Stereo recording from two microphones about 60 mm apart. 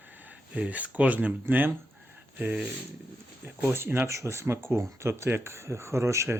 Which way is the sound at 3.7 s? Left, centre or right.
Right.